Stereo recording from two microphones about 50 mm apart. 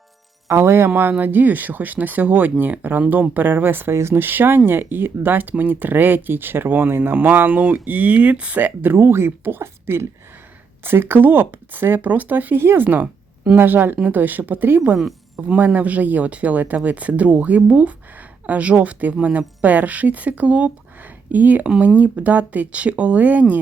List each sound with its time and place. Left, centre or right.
0.4 s speech: right
1.2 s speech: right
9.0 s speech: right
12.0 s speech: right
12.5 s speech: right
13.6 s speech: right